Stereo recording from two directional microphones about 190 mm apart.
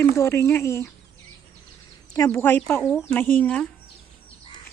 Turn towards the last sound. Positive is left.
turn(degrees=5)  # may be behind; listen again after turning